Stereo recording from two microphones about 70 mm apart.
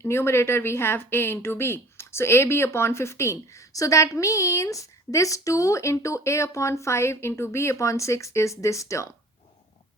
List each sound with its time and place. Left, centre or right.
0.0 s a woman's voice: left